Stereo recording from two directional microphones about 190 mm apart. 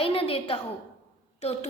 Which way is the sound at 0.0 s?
30° left (ahead or behind).